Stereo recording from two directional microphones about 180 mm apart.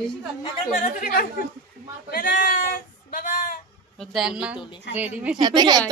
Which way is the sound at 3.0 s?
50° left (ahead or behind).